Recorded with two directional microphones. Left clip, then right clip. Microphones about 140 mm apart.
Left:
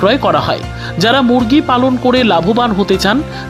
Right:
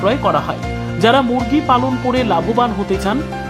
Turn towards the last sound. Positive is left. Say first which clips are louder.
# left 6 dB
turn(degrees=40)  # may be behind; listen again after turning